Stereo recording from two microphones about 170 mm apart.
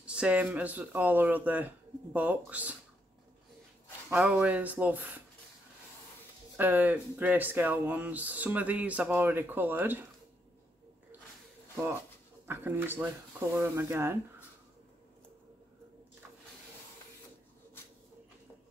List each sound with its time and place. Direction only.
0.0 s speech: 5° right (ahead or behind)
4.1 s speech: 5° right (ahead or behind)
6.5 s speech: 10° right (ahead or behind)
12.4 s speech: 10° right (ahead or behind)